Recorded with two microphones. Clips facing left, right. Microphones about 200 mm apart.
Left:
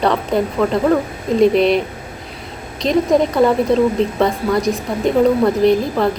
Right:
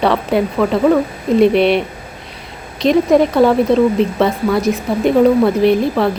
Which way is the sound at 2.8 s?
Centre (ahead or behind).